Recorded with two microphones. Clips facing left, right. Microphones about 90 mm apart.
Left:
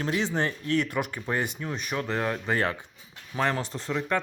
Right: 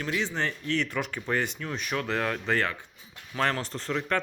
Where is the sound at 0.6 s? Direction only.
45° left (ahead or behind).